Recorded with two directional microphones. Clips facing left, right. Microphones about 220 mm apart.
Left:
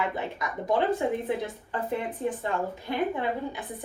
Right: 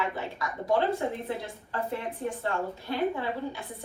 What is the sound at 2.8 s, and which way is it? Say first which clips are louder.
Speech: even; 15° left (ahead or behind).